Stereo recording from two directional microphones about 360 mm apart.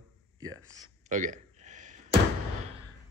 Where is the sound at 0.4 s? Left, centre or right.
Centre.